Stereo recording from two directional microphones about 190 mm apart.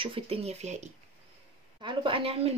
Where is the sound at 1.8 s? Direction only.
25° right (ahead or behind).